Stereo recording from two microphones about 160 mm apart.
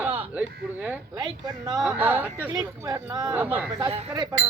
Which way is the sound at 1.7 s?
5° right (ahead or behind).